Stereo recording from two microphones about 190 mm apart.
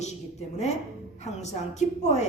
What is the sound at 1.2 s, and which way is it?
Speech, 35° left (ahead or behind).